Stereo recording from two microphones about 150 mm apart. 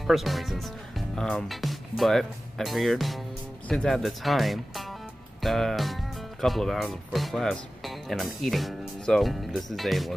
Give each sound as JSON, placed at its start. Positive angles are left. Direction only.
{"t": 0.0, "sound": "speech", "side_deg": 0}